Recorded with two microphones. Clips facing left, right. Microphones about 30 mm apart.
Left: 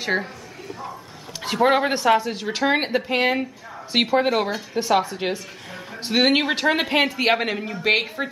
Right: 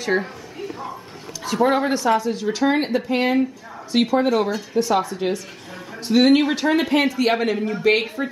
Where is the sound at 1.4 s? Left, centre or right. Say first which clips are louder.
Even; left.